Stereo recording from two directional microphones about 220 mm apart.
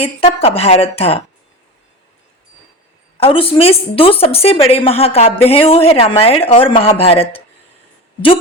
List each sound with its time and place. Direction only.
0.0 s a woman's voice: 25° left (ahead or behind)
3.2 s a woman's voice: 25° left (ahead or behind)